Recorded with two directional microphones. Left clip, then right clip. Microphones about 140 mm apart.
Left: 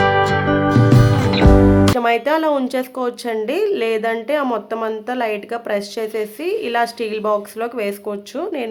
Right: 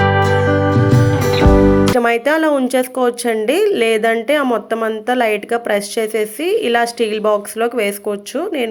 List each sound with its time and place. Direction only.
0.0 s music: centre (ahead or behind)
2.0 s speech: 30° right (ahead or behind)